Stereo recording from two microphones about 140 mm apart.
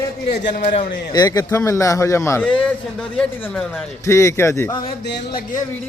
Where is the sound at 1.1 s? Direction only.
30° left (ahead or behind).